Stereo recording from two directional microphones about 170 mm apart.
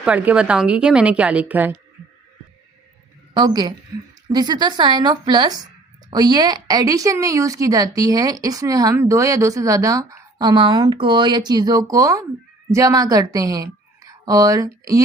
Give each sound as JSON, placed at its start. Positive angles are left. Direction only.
{"t": 0.0, "sound": "a woman's voice", "side_deg": -10}
{"t": 3.3, "sound": "a woman's voice", "side_deg": -25}